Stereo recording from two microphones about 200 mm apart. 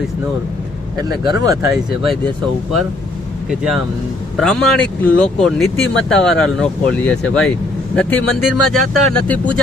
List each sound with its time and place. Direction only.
1.2 s speech: 20° right (ahead or behind)
4.4 s speech: centre (ahead or behind)